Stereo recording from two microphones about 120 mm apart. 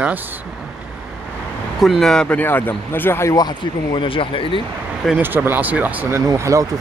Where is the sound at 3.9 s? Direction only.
45° left (ahead or behind).